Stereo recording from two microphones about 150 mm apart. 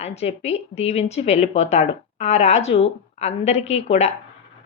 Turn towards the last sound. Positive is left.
turn(degrees=45)  # may be behind; listen again after turning